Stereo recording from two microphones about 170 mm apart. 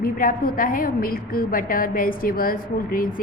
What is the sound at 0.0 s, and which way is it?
A woman's voice, 55° left (ahead or behind).